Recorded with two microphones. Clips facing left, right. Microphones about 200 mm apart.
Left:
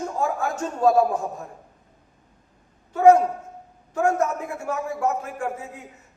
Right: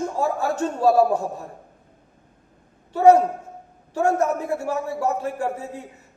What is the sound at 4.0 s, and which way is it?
A man's voice, 35° right (ahead or behind).